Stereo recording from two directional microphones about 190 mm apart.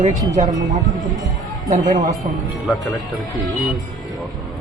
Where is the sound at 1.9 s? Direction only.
20° right (ahead or behind).